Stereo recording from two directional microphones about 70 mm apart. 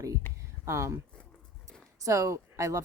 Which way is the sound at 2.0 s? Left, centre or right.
Right.